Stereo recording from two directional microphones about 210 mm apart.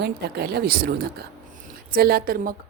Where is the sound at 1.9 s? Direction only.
45° right (ahead or behind).